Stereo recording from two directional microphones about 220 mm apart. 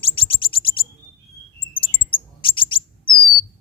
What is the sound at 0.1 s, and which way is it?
Bird, 25° left (ahead or behind).